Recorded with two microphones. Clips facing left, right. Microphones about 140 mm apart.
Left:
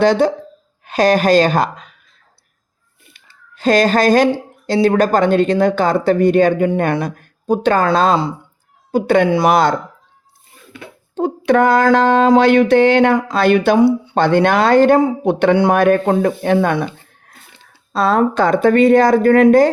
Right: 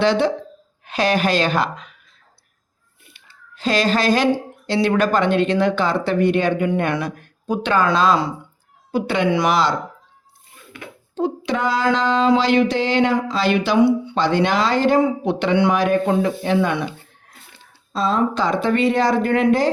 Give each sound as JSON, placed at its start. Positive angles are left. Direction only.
{"t": 0.0, "sound": "speech", "side_deg": 45}
{"t": 3.6, "sound": "speech", "side_deg": 45}
{"t": 11.1, "sound": "a sound", "side_deg": 50}
{"t": 13.7, "sound": "speech", "side_deg": 35}
{"t": 14.2, "sound": "a sound", "side_deg": 55}
{"t": 15.2, "sound": "speech", "side_deg": 55}
{"t": 17.9, "sound": "speech", "side_deg": 65}